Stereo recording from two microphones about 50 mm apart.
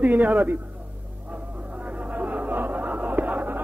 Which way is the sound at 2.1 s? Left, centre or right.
Right.